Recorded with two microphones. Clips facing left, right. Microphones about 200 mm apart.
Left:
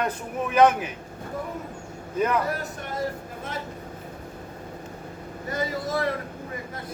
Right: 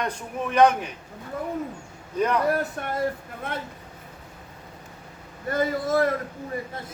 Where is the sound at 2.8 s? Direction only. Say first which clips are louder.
Right 5 dB; 55° right (ahead or behind).